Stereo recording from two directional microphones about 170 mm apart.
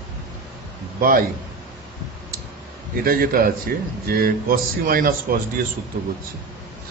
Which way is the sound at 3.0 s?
55° right (ahead or behind).